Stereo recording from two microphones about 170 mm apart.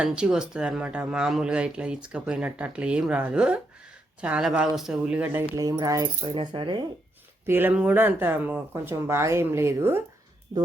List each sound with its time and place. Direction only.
0.0 s speech: 5° right (ahead or behind); by 6.8 s 30° right (ahead or behind)
7.4 s speech: 10° right (ahead or behind)